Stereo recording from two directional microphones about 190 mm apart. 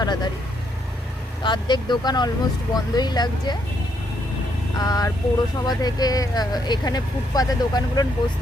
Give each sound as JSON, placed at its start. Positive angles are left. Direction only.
{"t": 0.0, "sound": "vehicle", "side_deg": 20}
{"t": 1.5, "sound": "speech", "side_deg": 25}
{"t": 4.8, "sound": "speech", "side_deg": 20}